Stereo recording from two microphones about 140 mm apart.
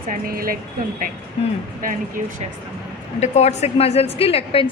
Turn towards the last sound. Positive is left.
turn(degrees=40)  # may be behind; listen again after turning